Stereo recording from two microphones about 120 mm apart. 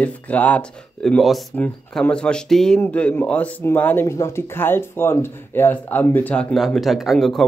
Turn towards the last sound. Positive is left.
turn(degrees=0)  # may be behind; listen again after turning